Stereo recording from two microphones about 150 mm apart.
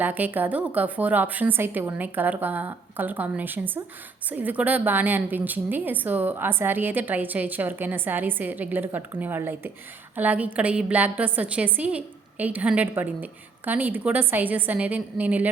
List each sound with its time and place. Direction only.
0.0 s a woman's voice: 10° right (ahead or behind)